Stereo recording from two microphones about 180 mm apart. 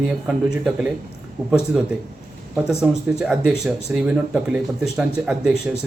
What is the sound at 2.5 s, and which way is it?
Speech, centre (ahead or behind).